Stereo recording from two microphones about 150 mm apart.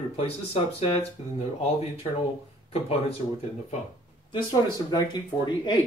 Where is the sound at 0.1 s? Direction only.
40° left (ahead or behind).